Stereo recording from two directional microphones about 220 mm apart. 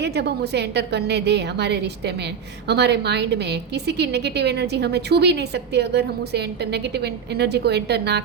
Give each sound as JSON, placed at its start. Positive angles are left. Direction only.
{"t": 0.0, "sound": "a woman's voice", "side_deg": -50}